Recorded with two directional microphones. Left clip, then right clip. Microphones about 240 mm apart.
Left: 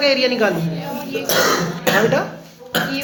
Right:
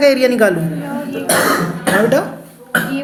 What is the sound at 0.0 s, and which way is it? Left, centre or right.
Speech, right.